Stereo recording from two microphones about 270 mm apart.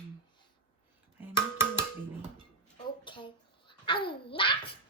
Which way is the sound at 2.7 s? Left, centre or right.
Centre.